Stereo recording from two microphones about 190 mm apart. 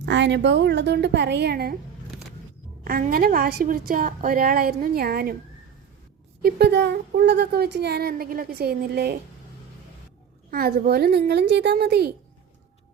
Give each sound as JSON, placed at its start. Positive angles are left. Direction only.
{"t": 0.0, "sound": "a woman's voice", "side_deg": -70}
{"t": 2.8, "sound": "a woman's voice", "side_deg": -50}
{"t": 6.4, "sound": "a woman's voice", "side_deg": -60}
{"t": 10.5, "sound": "a woman's voice", "side_deg": -50}